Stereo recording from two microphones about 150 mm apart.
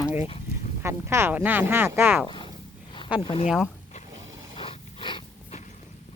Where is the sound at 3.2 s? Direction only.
35° left (ahead or behind).